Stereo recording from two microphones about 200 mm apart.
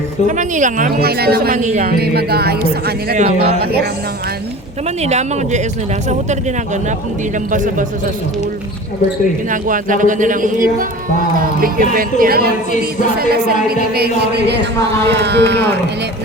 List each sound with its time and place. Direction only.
0.3 s speech: 40° right (ahead or behind)
3.2 s a man's voice: 30° right (ahead or behind)
3.6 s speech: 50° right (ahead or behind)
5.0 s a man's voice: 35° right (ahead or behind)
7.5 s a man's voice: 40° right (ahead or behind)
9.5 s a man's voice: 40° right (ahead or behind)
13.9 s a sound: 55° right (ahead or behind)